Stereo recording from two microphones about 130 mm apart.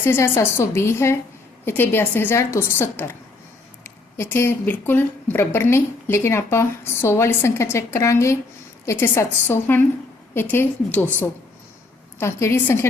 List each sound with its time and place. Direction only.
0.0 s a woman's voice: 20° left (ahead or behind)
4.2 s a woman's voice: 20° left (ahead or behind)